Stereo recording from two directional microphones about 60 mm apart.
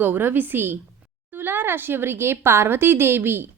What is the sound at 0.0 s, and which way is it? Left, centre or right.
A woman's voice, right.